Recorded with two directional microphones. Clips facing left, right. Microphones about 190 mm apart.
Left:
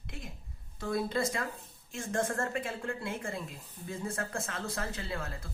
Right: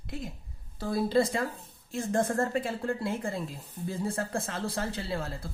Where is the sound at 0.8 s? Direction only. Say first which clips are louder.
Right 5 dB; 30° right (ahead or behind).